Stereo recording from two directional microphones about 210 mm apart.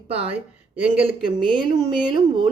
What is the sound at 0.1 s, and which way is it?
A woman's voice, 30° right (ahead or behind).